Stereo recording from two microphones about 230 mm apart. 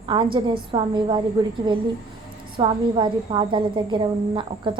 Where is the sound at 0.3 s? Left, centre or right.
Right.